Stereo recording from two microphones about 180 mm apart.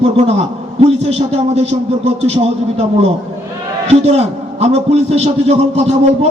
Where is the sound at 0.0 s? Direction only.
35° right (ahead or behind).